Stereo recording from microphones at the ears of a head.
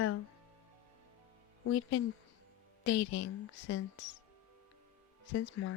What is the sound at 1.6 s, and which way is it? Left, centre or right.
Speech, left.